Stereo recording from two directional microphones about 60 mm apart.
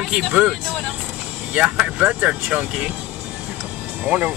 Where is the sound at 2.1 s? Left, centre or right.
Right.